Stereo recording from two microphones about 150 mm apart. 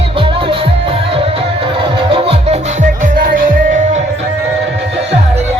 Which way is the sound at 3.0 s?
65° right (ahead or behind).